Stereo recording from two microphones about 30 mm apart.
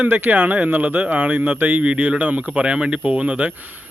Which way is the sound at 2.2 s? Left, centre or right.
Right.